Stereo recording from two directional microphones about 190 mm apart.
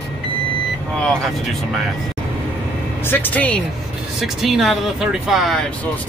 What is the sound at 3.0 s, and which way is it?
Speech, 10° left (ahead or behind).